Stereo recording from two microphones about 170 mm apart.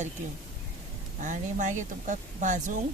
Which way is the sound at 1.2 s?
45° right (ahead or behind).